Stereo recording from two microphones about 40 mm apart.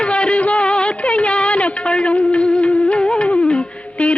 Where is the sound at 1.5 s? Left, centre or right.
Left.